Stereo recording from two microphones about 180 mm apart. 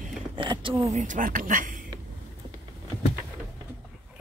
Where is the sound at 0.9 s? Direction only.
45° right (ahead or behind).